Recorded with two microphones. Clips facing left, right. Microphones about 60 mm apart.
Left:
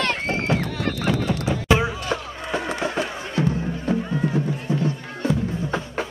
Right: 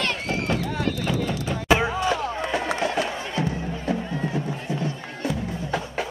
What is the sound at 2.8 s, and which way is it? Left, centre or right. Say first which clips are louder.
Music: right 1 dB; left.